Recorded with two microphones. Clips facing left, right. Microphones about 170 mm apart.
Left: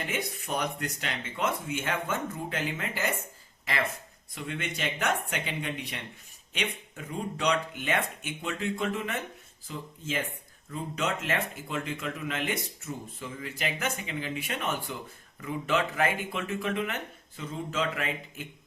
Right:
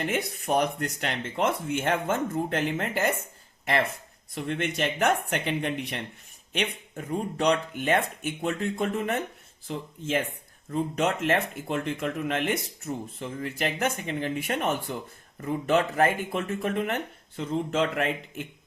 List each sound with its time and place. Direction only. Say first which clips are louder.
0.1 s speech: right 6 dB; 50° right (ahead or behind)
4.4 s speech: right 6 dB; 50° right (ahead or behind)